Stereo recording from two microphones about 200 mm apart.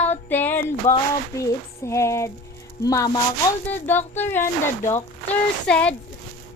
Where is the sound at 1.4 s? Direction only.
15° left (ahead or behind).